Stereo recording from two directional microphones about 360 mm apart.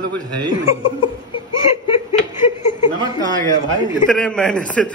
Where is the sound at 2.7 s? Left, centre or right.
Centre.